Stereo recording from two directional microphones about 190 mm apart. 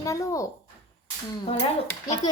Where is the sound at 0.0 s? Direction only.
15° left (ahead or behind).